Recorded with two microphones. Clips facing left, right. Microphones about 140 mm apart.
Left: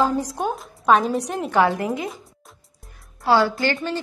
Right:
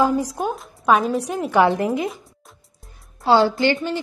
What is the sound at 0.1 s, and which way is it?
A woman's voice, centre (ahead or behind).